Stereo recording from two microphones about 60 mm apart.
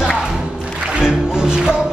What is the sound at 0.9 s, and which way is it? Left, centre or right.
Music, centre.